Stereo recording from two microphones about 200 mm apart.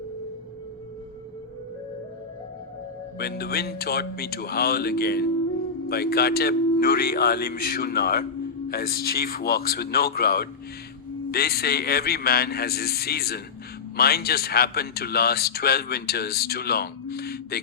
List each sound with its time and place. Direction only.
3.2 s a man's voice: 50° left (ahead or behind)